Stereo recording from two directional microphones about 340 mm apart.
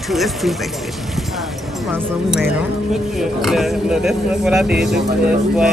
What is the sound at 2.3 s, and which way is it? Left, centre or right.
Speech, centre.